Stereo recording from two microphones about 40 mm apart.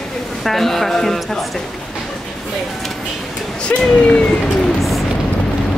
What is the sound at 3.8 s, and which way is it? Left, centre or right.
Speech, left.